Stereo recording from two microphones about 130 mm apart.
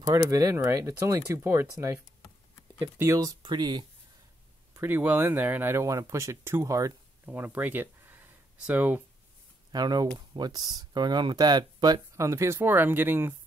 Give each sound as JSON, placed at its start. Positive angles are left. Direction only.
{"t": 0.0, "sound": "speech", "side_deg": -25}
{"t": 4.7, "sound": "speech", "side_deg": -15}
{"t": 9.7, "sound": "speech", "side_deg": -30}